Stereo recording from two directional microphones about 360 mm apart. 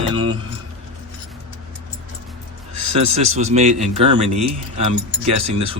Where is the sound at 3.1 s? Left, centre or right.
Centre.